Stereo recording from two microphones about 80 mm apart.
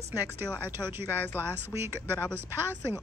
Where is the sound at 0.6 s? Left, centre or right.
Right.